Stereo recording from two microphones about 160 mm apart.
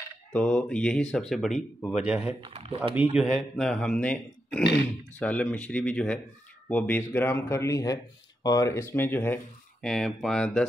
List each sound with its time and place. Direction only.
0.3 s speech: 5° left (ahead or behind)
2.5 s speech: 40° right (ahead or behind)
3.2 s speech: centre (ahead or behind)